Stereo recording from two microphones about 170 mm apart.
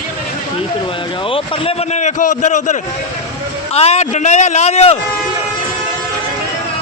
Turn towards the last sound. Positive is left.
turn(degrees=40)  # may be behind; listen again after turning